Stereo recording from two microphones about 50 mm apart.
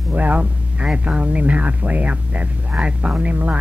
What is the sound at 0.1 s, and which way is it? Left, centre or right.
Speech, right.